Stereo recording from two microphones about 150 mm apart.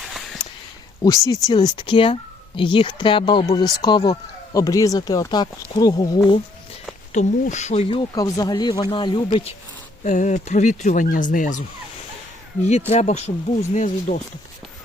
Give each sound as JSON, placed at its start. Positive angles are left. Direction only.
{"t": 1.0, "sound": "speech", "side_deg": 25}
{"t": 7.1, "sound": "speech", "side_deg": 55}
{"t": 8.1, "sound": "speech", "side_deg": 25}
{"t": 10.0, "sound": "speech", "side_deg": 55}
{"t": 12.9, "sound": "speech", "side_deg": 45}